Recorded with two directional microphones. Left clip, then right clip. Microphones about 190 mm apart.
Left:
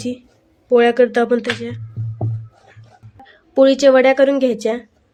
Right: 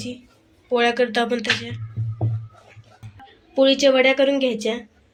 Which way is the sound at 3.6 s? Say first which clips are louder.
Left 5 dB; 45° left (ahead or behind).